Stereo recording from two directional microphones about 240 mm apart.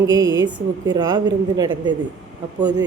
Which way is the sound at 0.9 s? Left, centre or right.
Centre.